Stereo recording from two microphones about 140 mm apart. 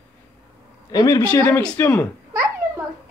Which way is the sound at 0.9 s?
25° left (ahead or behind).